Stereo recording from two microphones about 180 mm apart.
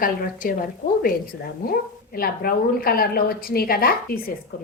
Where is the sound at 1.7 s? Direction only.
55° left (ahead or behind).